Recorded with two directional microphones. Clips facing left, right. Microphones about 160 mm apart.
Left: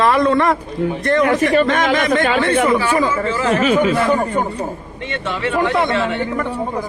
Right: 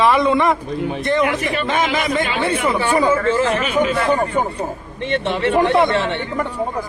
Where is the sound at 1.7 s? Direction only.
5° right (ahead or behind).